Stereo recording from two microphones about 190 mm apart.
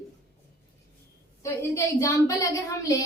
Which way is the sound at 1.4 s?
15° left (ahead or behind).